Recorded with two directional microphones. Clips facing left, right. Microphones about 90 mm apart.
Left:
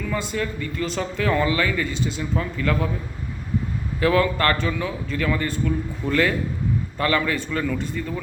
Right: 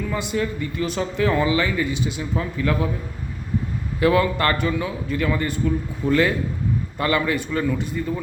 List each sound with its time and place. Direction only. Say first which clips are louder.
0.0 s speech: right 2 dB; 15° right (ahead or behind)
4.0 s speech: right 1 dB; 20° right (ahead or behind)